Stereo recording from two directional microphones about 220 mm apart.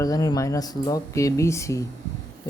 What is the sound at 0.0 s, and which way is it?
Speech, 15° left (ahead or behind).